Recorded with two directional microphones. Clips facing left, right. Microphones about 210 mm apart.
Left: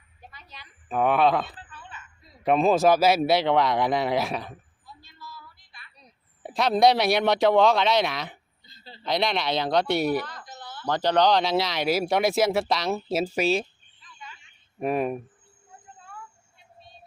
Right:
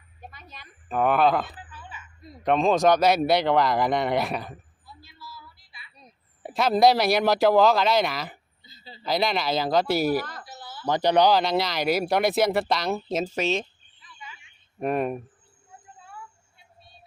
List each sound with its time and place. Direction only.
0.2 s a sound: 50° right (ahead or behind)
0.9 s speech: centre (ahead or behind)
4.9 s child singing: 5° right (ahead or behind)
6.4 s speech: centre (ahead or behind)
14.8 s speech: centre (ahead or behind)